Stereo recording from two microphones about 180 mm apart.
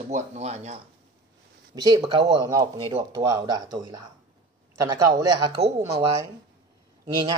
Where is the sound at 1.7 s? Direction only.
20° right (ahead or behind).